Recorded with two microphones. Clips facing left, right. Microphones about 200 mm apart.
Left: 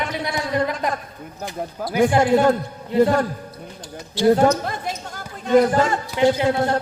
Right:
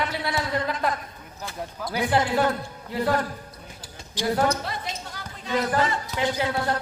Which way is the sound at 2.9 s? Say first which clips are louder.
Left 8 dB; 25° left (ahead or behind).